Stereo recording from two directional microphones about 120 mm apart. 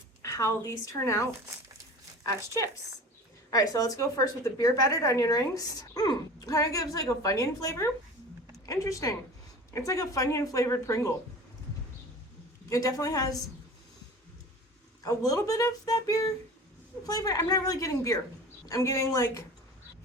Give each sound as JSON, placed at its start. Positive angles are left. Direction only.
{"t": 0.2, "sound": "a woman's voice", "side_deg": 25}
{"t": 3.5, "sound": "a woman's voice", "side_deg": 30}
{"t": 12.6, "sound": "a woman's voice", "side_deg": 30}
{"t": 15.0, "sound": "a woman's voice", "side_deg": 30}